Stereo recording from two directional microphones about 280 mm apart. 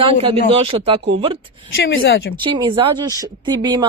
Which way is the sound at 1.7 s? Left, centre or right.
Left.